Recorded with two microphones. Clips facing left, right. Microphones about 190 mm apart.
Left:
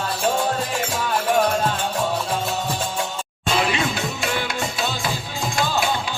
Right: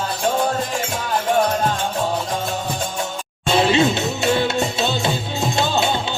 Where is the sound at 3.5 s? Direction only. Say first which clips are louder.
Right 6 dB; 25° right (ahead or behind).